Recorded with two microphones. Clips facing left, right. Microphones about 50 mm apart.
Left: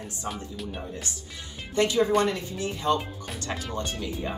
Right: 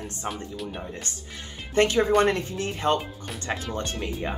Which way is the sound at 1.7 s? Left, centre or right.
Right.